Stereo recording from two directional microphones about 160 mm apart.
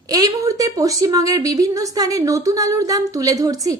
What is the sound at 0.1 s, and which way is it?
A woman's voice, 20° right (ahead or behind).